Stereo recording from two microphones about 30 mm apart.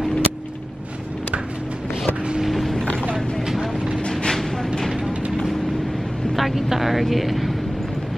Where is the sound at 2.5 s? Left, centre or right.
Centre.